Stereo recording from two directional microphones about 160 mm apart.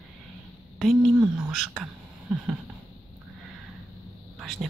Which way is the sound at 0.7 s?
Centre (ahead or behind).